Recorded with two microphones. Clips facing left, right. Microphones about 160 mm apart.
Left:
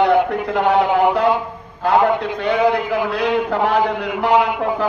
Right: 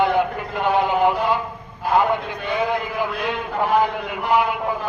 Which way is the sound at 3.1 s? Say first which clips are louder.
Left 7 dB; 90° left.